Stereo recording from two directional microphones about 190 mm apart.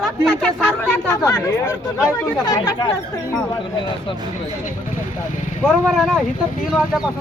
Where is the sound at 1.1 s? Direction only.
15° left (ahead or behind).